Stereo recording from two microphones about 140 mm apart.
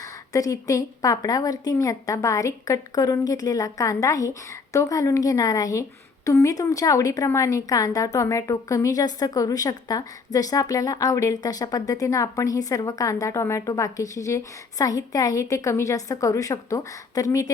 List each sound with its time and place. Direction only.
0.0 s a woman's voice: 25° left (ahead or behind)